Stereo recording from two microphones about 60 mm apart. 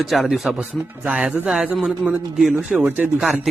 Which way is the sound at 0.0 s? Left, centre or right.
Centre.